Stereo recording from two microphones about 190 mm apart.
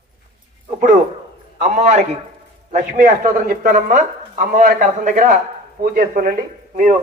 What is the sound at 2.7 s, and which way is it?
Speech, 45° right (ahead or behind).